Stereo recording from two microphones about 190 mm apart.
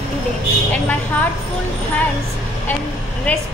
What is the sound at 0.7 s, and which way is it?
Speech, 5° left (ahead or behind).